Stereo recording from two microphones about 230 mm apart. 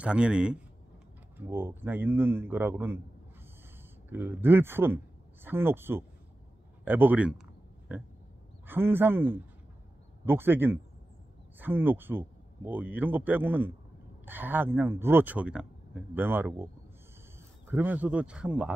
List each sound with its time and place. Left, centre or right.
0.0 s speech: centre
4.1 s speech: centre